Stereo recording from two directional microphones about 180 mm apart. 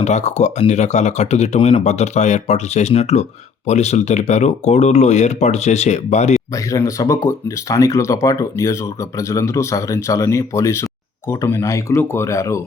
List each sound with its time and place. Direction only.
0.0 s speech: 40° left (ahead or behind)
6.7 s speech: 20° left (ahead or behind)